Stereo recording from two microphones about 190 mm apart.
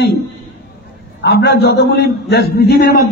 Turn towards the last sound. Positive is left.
turn(degrees=55)  # may be behind; listen again after turning